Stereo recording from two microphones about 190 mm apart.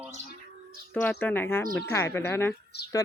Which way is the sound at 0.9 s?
10° left (ahead or behind).